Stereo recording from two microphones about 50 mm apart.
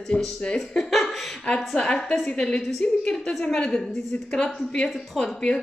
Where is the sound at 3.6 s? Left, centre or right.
Left.